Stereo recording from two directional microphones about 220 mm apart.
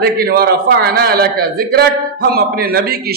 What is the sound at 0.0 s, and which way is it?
A man's voice, 45° right (ahead or behind).